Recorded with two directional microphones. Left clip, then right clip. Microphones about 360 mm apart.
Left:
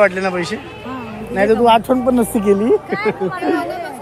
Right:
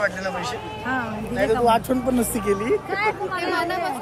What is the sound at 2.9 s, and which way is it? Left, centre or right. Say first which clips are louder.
Speech: left 4 dB; centre.